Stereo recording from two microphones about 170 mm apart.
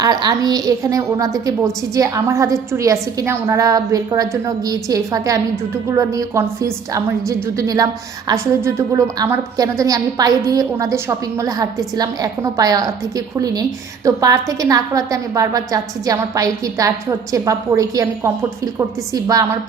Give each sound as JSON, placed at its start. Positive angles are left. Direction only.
{"t": 0.0, "sound": "a woman's voice", "side_deg": -25}